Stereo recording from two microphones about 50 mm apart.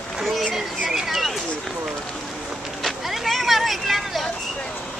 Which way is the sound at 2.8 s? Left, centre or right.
Centre.